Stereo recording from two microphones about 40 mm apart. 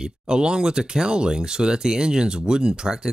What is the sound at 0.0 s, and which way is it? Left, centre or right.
Speech, right.